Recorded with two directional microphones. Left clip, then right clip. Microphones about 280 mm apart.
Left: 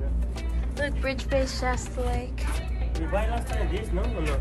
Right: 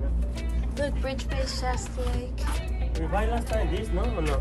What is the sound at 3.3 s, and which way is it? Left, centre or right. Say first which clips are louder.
Speech: right 2 dB; centre.